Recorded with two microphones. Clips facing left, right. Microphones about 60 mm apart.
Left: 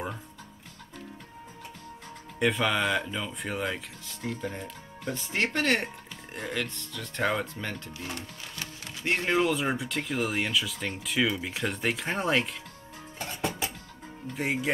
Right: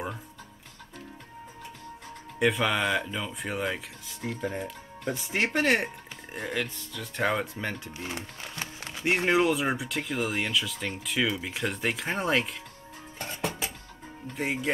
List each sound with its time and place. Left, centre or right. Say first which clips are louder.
2.3 s speech: right 1 dB; centre
8.1 s music: right 2 dB; right
9.0 s speech: right 2 dB; centre
14.3 s speech: left 1 dB; centre